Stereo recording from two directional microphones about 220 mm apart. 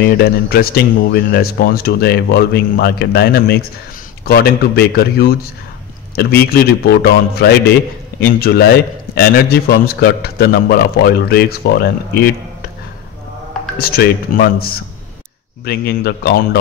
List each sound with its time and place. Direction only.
0.0 s speech: 45° left (ahead or behind)
13.7 s speech: 45° left (ahead or behind)